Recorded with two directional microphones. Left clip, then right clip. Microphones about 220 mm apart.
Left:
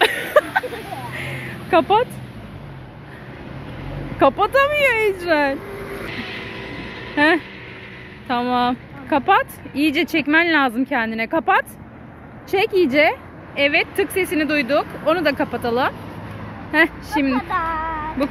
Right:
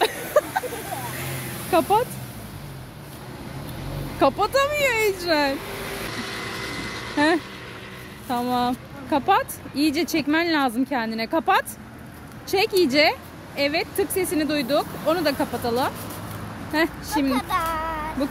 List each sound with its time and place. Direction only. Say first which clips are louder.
0.0 s a sound: left 5 dB; centre (ahead or behind)
1.7 s speech: left 4 dB; 5° right (ahead or behind)
4.2 s speech: left 4 dB; 5° right (ahead or behind)
6.1 s vehicle: left 1 dB; 35° right (ahead or behind)
8.3 s speech: left 4 dB; 5° right (ahead or behind)
17.3 s a sound: left 2 dB; 40° right (ahead or behind)